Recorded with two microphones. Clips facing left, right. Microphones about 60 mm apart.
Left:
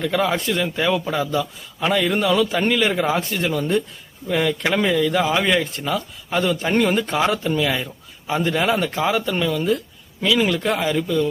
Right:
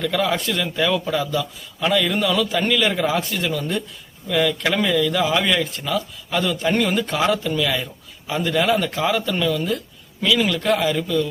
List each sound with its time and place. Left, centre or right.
0.0 s speech: left